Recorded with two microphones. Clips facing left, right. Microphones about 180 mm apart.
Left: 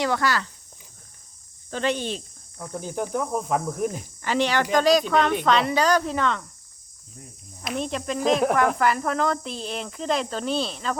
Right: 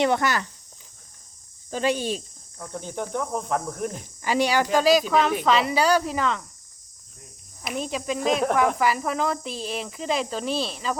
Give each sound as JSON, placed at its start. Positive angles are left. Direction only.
{"t": 0.0, "sound": "speech", "side_deg": -20}
{"t": 1.7, "sound": "speech", "side_deg": -10}
{"t": 2.6, "sound": "speech", "side_deg": 5}
{"t": 4.2, "sound": "speech", "side_deg": -10}
{"t": 7.6, "sound": "speech", "side_deg": -5}